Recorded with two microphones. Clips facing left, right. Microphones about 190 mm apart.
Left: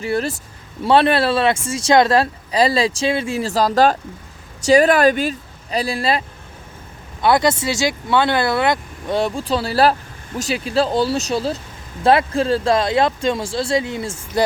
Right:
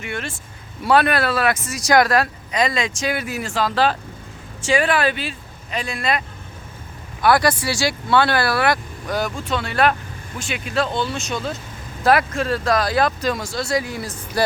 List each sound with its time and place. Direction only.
0.0 s speech: 35° left (ahead or behind)